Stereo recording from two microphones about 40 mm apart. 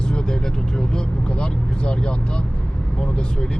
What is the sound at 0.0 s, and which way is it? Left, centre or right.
Vehicle, left.